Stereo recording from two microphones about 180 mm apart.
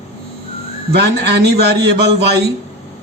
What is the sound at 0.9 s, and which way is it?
A man's voice, 70° right (ahead or behind).